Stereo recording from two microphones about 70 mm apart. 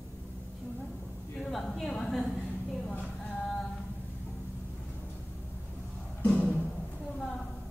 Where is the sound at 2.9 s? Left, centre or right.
Left.